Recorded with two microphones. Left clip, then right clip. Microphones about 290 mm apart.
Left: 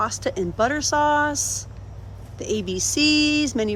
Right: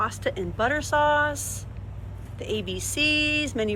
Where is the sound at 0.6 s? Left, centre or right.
Centre.